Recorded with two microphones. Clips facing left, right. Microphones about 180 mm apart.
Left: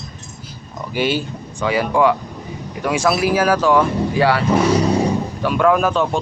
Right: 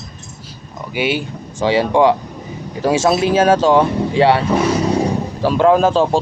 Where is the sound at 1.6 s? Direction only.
25° right (ahead or behind).